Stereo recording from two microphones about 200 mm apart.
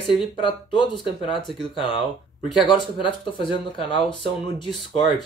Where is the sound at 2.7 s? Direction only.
25° left (ahead or behind).